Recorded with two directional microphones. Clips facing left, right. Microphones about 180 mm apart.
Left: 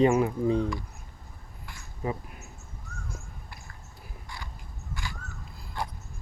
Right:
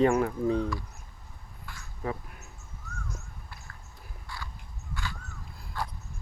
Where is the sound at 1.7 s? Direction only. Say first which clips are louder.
Left 2 dB; 15° left (ahead or behind).